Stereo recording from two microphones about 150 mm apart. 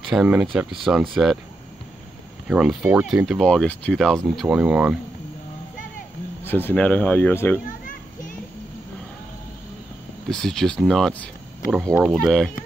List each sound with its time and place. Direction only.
0.1 s speech: 5° right (ahead or behind)
2.4 s speech: 5° right (ahead or behind)
6.4 s speech: 15° left (ahead or behind)
7.6 s children playing: 65° left (ahead or behind)
10.3 s speech: 5° left (ahead or behind)